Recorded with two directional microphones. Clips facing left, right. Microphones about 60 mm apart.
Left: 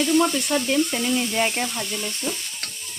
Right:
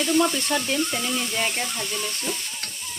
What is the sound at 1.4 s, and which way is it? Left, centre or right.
Speech, centre.